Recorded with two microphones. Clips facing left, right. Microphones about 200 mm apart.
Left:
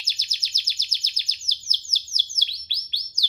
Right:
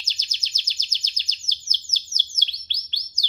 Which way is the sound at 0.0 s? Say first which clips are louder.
Right 1 dB; 10° left (ahead or behind).